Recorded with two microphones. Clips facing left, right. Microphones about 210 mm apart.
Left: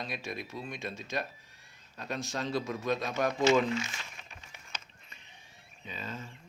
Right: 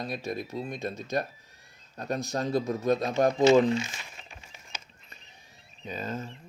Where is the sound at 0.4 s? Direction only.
25° right (ahead or behind).